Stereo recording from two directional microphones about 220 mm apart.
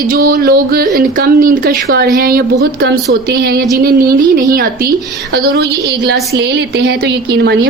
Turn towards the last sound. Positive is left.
turn(degrees=-50)  # may be behind; listen again after turning